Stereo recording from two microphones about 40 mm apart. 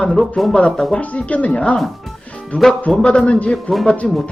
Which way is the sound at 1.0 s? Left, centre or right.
Left.